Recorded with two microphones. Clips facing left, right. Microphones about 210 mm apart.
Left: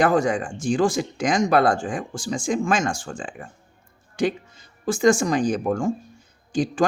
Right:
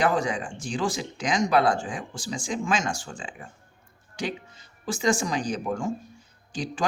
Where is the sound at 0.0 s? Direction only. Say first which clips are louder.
Left 5 dB; 50° left (ahead or behind).